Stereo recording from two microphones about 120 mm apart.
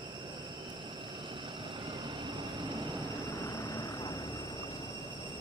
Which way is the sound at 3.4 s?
30° left (ahead or behind).